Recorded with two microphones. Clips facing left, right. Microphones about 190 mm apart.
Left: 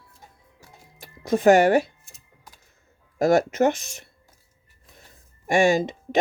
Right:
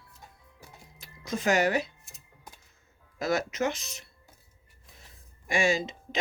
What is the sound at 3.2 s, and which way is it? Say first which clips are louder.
Speech: left 9 dB; 55° left (ahead or behind).